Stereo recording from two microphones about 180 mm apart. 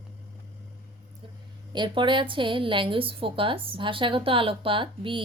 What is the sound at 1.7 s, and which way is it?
A woman's voice, 25° right (ahead or behind).